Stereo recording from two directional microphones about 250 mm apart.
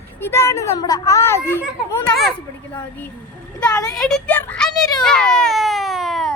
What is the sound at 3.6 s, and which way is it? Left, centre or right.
Speech, centre.